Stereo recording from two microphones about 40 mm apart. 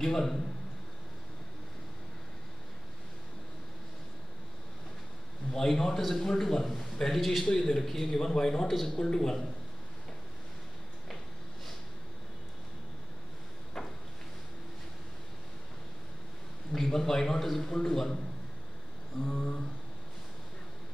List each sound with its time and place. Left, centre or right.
0.0 s a man's voice: centre
5.7 s a man's voice: centre
8.1 s a man's voice: centre
13.8 s a sound: centre
16.7 s a man's voice: centre
19.2 s a sound: centre